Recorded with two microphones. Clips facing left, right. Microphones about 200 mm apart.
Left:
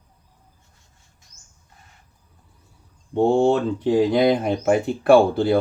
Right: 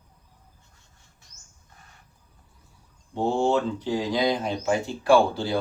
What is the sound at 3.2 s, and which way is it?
Speech, 60° left (ahead or behind).